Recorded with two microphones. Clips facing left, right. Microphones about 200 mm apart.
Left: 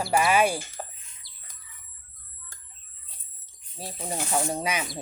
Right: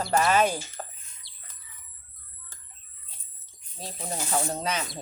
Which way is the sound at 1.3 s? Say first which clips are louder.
Left 1 dB; 25° right (ahead or behind).